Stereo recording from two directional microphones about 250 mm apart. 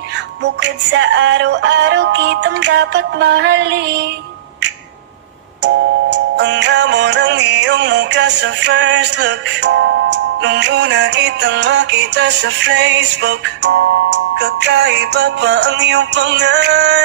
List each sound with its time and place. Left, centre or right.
0.4 s music: right
5.6 s music: right